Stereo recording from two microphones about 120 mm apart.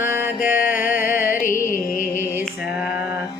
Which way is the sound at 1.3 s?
90° left.